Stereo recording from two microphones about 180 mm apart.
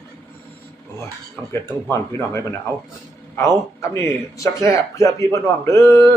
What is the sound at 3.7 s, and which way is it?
Speech, 15° left (ahead or behind).